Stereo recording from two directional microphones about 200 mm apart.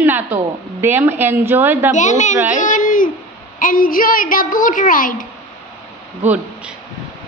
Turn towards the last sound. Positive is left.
turn(degrees=-5)  # may be behind; listen again after turning